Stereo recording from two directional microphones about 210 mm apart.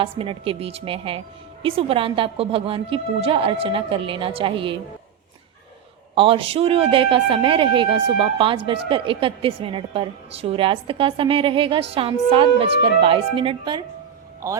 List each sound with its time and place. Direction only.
0.0 s speech: 25° right (ahead or behind)
6.1 s speech: 25° right (ahead or behind)